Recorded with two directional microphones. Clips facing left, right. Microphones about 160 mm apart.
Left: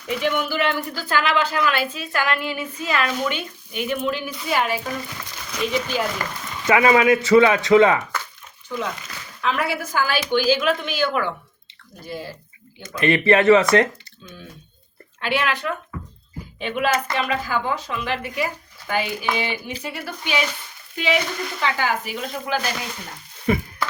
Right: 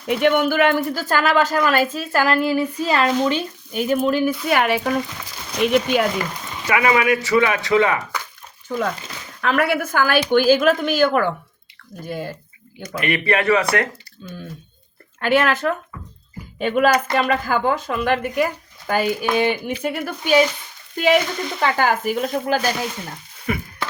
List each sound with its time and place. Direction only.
0.1 s speech: 60° right (ahead or behind); by 4.3 s 45° right (ahead or behind)
4.4 s speech: 65° right (ahead or behind)
6.7 s a man's voice: 25° left (ahead or behind)
9.4 s speech: 55° right (ahead or behind)
12.8 s a man's voice: 25° left (ahead or behind)
15.2 s speech: 45° right (ahead or behind)